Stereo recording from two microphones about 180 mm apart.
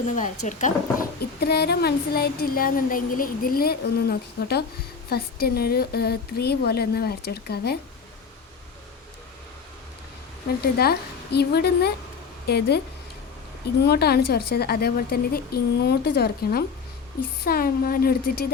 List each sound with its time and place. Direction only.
0.2 s speech: 45° left (ahead or behind)
1.4 s a woman's voice: 65° left (ahead or behind)
10.6 s a woman's voice: 60° left (ahead or behind)
13.8 s a woman's voice: 60° left (ahead or behind)